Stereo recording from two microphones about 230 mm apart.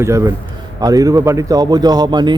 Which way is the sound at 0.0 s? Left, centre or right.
Centre.